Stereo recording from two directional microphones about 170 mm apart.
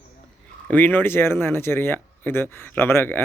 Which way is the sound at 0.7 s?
10° left (ahead or behind).